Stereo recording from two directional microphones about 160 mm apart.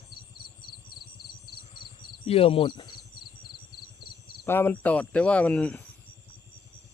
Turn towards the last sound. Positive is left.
turn(degrees=5)  # may be behind; listen again after turning